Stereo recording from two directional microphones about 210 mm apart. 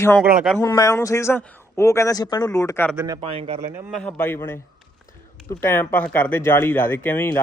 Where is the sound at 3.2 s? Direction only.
25° right (ahead or behind).